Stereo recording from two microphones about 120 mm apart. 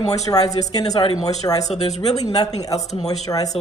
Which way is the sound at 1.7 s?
65° left (ahead or behind).